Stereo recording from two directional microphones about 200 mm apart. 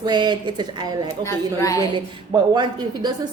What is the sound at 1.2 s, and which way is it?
Speech, 15° left (ahead or behind).